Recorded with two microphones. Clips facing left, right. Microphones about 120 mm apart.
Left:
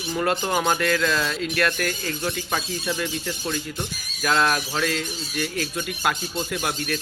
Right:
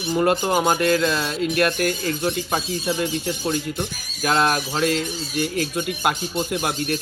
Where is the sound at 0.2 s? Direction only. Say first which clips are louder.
Right 4 dB; 15° right (ahead or behind).